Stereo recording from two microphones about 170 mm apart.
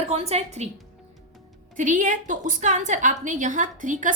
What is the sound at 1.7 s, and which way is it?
A woman's voice, 50° right (ahead or behind).